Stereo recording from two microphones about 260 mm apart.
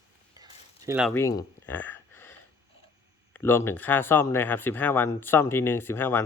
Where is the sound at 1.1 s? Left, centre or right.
Centre.